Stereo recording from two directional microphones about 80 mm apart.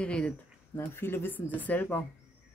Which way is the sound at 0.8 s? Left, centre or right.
Left.